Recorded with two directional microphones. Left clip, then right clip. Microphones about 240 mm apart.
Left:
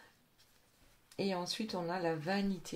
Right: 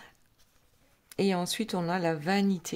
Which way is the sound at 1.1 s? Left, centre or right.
Right.